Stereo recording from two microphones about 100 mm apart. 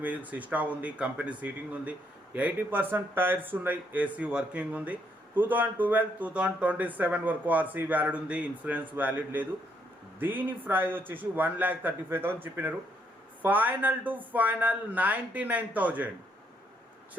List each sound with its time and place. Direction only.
0.0 s a man's voice: 15° right (ahead or behind)